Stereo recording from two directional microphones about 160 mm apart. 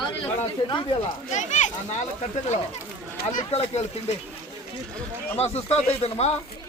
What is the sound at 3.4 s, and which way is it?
Speech, 40° left (ahead or behind).